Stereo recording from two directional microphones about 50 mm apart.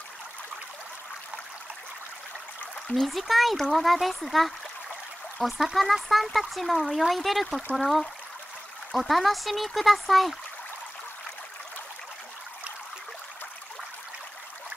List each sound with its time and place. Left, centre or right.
2.9 s speech: centre